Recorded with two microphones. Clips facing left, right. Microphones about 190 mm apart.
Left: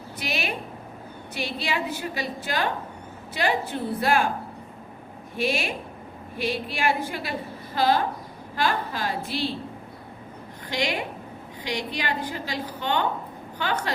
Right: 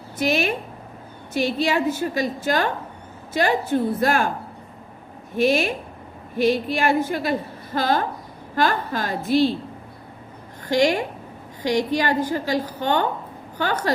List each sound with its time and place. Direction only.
0.2 s a woman's voice: 45° right (ahead or behind)
5.4 s a woman's voice: 45° right (ahead or behind)
10.7 s a woman's voice: 45° right (ahead or behind)